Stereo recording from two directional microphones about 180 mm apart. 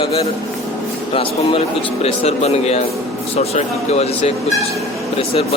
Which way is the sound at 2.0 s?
35° left (ahead or behind).